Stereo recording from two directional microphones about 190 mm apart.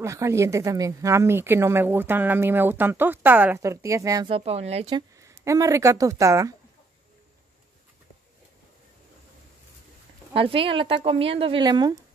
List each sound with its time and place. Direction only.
0.0 s speech: 15° right (ahead or behind); by 5.0 s 30° right (ahead or behind)
5.1 s speech: 15° right (ahead or behind)
10.3 s a woman's voice: 30° right (ahead or behind)